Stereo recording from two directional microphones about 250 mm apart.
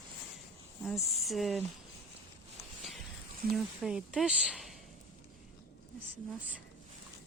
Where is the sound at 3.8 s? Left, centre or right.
Centre.